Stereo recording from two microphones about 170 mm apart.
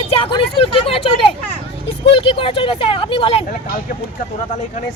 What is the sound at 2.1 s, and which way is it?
Speech, 30° left (ahead or behind).